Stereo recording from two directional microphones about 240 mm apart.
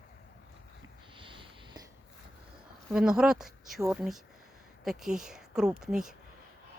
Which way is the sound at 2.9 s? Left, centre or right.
Centre.